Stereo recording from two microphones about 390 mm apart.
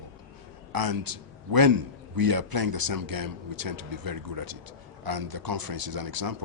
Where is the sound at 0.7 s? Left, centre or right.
Right.